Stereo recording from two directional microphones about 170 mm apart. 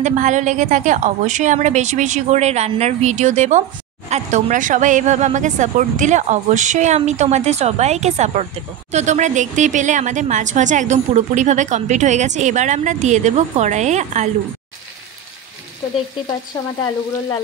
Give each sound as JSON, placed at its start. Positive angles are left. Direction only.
{"t": 0.0, "sound": "a woman's voice", "side_deg": -45}